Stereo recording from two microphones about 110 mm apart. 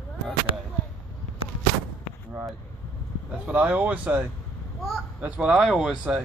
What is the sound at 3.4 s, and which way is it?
Speech, 10° right (ahead or behind).